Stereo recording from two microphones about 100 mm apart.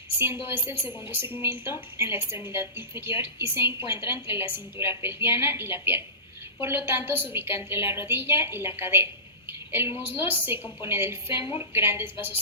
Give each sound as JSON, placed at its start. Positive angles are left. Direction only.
{"t": 0.4, "sound": "a woman's voice", "side_deg": -25}
{"t": 11.3, "sound": "a woman's voice", "side_deg": 55}
{"t": 11.7, "sound": "a woman's voice", "side_deg": -25}